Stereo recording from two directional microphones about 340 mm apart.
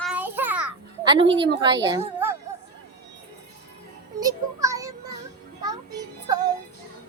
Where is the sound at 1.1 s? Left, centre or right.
Centre.